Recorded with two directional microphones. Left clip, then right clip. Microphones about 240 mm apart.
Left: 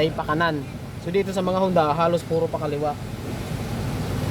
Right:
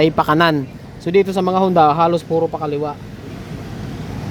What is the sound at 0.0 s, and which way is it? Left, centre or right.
Speech, right.